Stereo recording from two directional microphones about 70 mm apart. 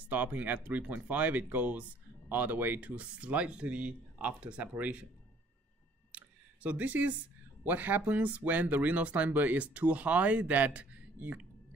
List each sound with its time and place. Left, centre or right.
0.0 s speech: right
6.1 s a sound: right
7.6 s speech: right